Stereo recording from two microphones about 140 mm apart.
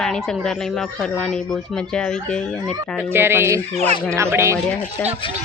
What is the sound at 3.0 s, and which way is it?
Speech, 15° right (ahead or behind).